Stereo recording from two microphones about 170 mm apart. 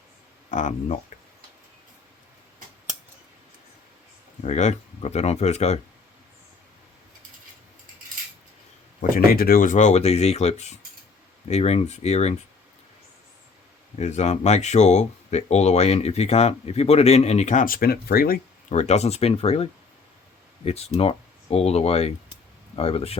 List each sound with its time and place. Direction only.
0.5 s speech: 45° left (ahead or behind)
4.4 s speech: 40° left (ahead or behind)
9.0 s speech: 60° left (ahead or behind); by 12.4 s 40° left (ahead or behind)
14.0 s speech: 40° left (ahead or behind); by 18.3 s 60° left (ahead or behind)
18.7 s speech: 40° left (ahead or behind)
20.6 s speech: 35° left (ahead or behind)